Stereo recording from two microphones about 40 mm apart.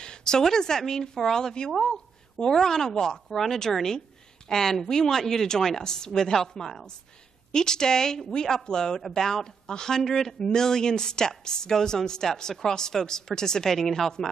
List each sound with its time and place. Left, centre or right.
0.0 s speech: centre